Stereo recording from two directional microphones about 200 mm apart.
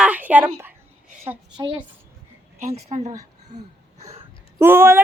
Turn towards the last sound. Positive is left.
turn(degrees=-10)  # may be behind; listen again after turning